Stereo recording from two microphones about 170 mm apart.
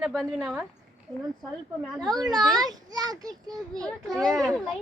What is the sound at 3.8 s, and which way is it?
Speech, 5° left (ahead or behind).